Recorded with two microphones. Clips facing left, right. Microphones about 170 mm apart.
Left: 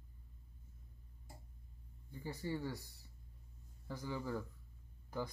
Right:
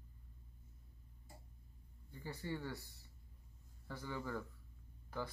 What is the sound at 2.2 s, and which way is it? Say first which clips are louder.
Speech: left 3 dB; 10° left (ahead or behind).